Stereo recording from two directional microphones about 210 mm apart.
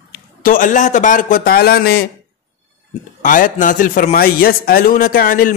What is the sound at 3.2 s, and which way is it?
A man's voice, 40° left (ahead or behind).